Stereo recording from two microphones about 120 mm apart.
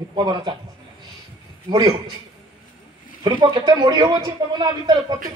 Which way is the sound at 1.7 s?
35° right (ahead or behind).